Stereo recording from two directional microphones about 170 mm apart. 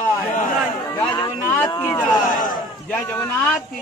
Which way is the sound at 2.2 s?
50° left (ahead or behind).